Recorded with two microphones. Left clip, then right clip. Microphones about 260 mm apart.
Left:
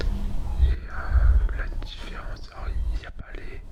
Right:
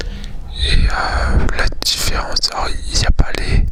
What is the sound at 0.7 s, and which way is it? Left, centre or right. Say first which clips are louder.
Speech: right 17 dB; right.